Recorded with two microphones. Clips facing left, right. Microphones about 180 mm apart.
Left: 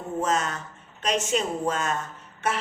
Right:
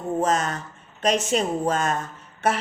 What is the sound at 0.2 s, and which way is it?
Speech, 35° right (ahead or behind).